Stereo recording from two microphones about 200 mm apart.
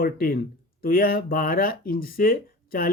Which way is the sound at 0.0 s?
45° left (ahead or behind).